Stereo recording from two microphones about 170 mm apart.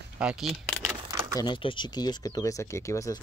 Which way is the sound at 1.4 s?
30° left (ahead or behind).